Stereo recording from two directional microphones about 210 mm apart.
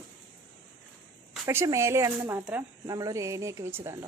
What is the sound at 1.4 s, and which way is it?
Speech, 10° right (ahead or behind).